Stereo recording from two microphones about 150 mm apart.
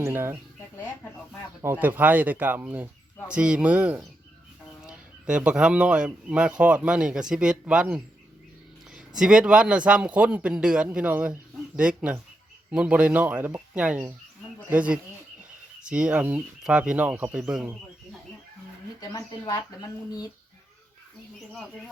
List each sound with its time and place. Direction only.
0.0 s speech: 15° right (ahead or behind)
1.6 s speech: 10° right (ahead or behind)
18.9 s speech: 25° left (ahead or behind)